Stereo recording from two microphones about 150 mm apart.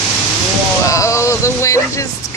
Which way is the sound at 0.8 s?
20° left (ahead or behind).